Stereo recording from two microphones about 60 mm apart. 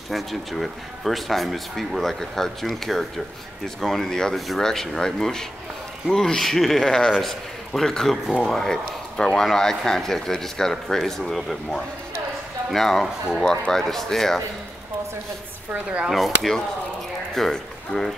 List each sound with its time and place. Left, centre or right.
0.1 s speech: centre
15.7 s speech: right
16.1 s speech: centre